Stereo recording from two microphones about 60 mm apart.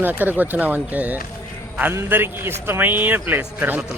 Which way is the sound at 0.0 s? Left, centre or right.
Right.